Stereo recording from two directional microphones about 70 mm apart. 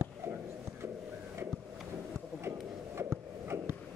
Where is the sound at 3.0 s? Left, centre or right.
Right.